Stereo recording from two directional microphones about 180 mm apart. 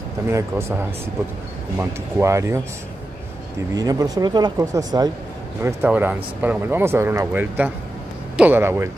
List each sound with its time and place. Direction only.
0.3 s speech: 15° right (ahead or behind)
1.8 s speech: 15° right (ahead or behind)
3.7 s speech: 20° right (ahead or behind)